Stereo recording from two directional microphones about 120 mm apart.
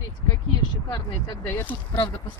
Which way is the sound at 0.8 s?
40° left (ahead or behind).